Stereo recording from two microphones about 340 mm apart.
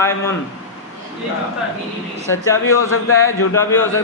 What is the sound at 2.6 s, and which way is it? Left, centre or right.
Speech, left.